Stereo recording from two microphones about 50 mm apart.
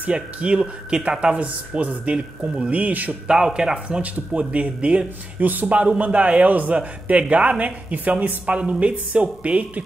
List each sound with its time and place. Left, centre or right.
0.0 s speech: right
2.1 s speech: centre
2.7 s speech: right
3.3 s a man's voice: centre